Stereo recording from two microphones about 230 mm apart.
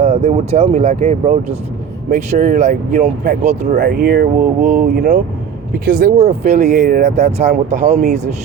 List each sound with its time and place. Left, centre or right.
0.0 s speech: right
3.8 s speech: right